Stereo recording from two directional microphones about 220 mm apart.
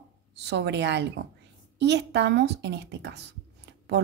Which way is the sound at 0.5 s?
50° right (ahead or behind).